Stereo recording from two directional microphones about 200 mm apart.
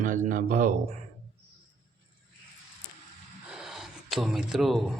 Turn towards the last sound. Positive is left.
turn(degrees=0)  # may be behind; listen again after turning